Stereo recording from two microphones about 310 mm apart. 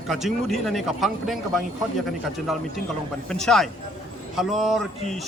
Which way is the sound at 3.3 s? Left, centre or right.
Centre.